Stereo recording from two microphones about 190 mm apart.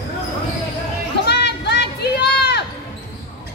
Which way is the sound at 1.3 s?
60° left (ahead or behind).